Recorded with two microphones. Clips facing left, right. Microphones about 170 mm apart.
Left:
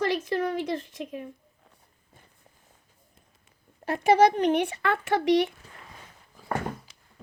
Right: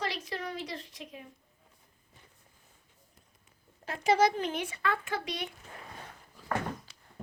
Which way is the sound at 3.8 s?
60° left (ahead or behind).